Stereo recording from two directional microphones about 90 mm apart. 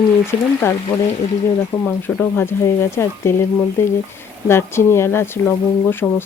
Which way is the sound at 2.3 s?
30° left (ahead or behind).